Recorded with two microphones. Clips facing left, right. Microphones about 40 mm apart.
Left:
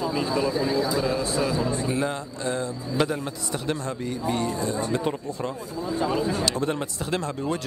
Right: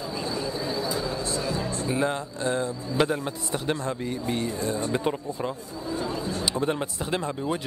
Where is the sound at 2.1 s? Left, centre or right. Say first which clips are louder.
Right 1 dB; right.